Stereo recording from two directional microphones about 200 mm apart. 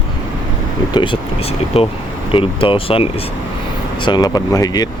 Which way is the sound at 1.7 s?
30° left (ahead or behind).